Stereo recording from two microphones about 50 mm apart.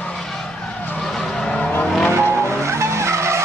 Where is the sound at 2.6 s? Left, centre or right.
Right.